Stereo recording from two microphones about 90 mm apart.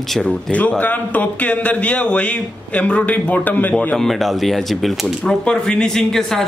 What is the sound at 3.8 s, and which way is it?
Speech, 10° left (ahead or behind).